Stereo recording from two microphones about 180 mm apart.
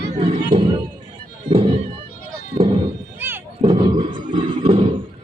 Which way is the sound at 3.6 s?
25° right (ahead or behind).